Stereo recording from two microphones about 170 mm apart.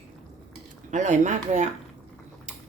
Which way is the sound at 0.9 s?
45° right (ahead or behind).